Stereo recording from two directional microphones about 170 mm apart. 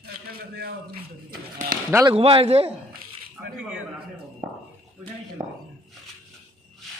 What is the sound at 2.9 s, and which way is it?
Dog, 60° right (ahead or behind).